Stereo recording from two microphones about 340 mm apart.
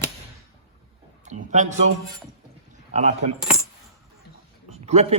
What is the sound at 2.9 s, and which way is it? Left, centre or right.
Speech, centre.